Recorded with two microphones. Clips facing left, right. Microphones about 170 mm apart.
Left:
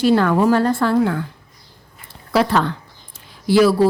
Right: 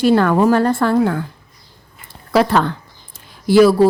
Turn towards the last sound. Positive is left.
turn(degrees=-45)  # may be behind; listen again after turning